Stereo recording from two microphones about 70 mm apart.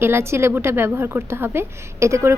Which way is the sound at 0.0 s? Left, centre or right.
Right.